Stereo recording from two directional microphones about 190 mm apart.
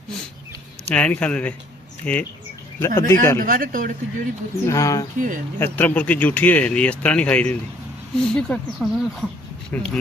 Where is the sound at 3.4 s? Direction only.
45° right (ahead or behind).